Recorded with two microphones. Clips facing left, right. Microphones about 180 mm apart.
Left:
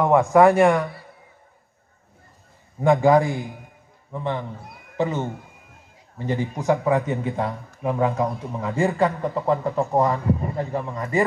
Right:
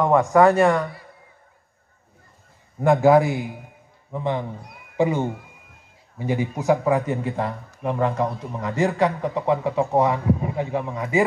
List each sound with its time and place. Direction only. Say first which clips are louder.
0.0 s speech: left 1 dB; 10° left (ahead or behind)
2.8 s speech: right 1 dB; 5° right (ahead or behind)